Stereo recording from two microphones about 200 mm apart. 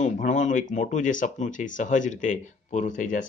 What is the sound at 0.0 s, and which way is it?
Speech, 40° left (ahead or behind).